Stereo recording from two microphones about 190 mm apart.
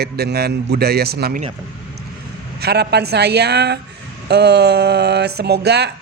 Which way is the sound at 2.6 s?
60° right (ahead or behind).